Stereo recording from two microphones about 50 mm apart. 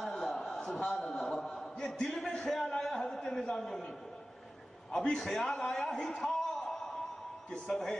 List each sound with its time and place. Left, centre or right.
0.0 s a sound: centre
2.5 s a man's voice: centre
4.9 s a man's voice: centre